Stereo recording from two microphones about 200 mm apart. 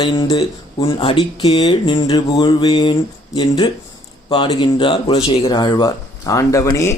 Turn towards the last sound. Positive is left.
turn(degrees=15)  # may be behind; listen again after turning